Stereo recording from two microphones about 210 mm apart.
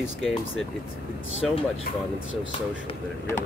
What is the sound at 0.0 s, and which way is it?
Speech, centre (ahead or behind).